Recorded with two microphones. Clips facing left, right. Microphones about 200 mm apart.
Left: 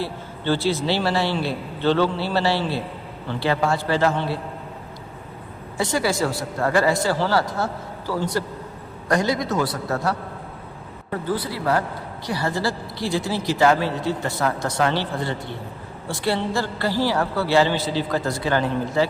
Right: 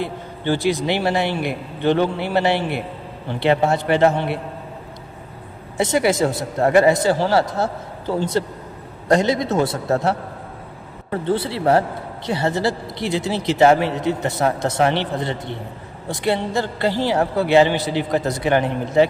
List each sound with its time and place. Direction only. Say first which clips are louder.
0.0 s a man's voice: right 2 dB; 15° right (ahead or behind)
5.7 s a man's voice: right 4 dB; 20° right (ahead or behind)
11.3 s a man's voice: right 5 dB; 25° right (ahead or behind)